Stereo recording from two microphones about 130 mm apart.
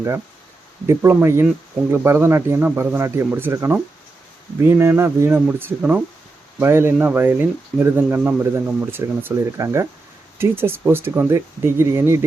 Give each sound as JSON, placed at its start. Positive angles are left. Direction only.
{"t": 0.9, "sound": "speech", "side_deg": -20}